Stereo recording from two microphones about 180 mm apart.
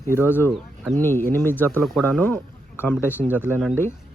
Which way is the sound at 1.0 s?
10° left (ahead or behind).